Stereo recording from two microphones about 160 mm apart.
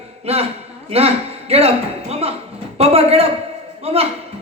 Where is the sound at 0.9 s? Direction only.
40° right (ahead or behind).